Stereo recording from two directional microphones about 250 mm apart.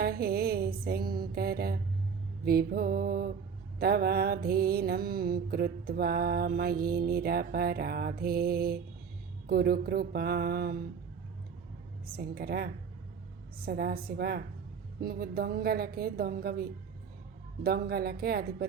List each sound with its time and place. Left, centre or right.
0.0 s mantra: right
12.1 s mantra: right